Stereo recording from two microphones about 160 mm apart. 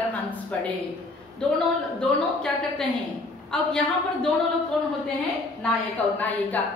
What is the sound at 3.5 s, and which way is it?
Speech, 5° left (ahead or behind).